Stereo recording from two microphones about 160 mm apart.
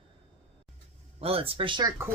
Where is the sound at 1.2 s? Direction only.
35° right (ahead or behind).